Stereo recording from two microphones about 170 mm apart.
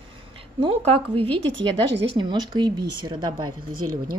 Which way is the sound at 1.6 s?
90° right.